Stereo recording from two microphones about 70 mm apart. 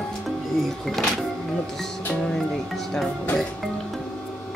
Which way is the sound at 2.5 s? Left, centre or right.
Centre.